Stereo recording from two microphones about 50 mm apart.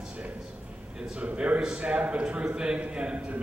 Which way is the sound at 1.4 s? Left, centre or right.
Right.